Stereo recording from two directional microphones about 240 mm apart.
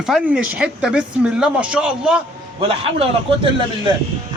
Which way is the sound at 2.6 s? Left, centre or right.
Right.